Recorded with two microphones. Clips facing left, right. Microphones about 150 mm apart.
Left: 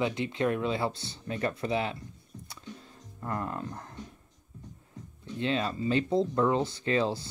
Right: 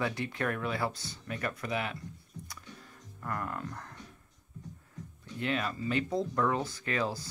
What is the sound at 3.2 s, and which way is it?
Speech, 25° left (ahead or behind).